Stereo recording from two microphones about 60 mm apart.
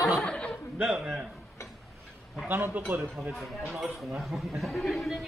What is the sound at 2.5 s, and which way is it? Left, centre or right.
Speech, right.